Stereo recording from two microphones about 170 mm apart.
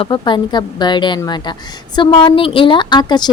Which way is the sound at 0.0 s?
30° left (ahead or behind).